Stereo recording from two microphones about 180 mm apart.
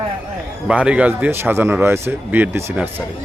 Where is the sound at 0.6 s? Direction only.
5° right (ahead or behind).